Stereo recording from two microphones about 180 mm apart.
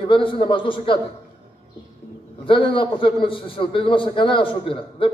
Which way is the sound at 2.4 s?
30° left (ahead or behind).